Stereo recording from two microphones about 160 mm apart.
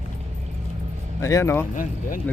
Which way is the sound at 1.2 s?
20° left (ahead or behind).